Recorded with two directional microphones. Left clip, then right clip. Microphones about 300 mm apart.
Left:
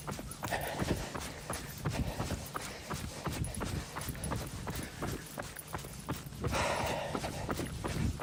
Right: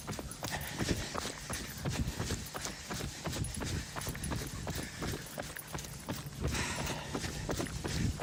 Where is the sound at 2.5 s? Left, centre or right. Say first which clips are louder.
Even; centre.